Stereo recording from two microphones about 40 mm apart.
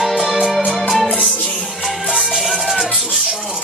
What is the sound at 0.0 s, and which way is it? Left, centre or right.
Music, centre.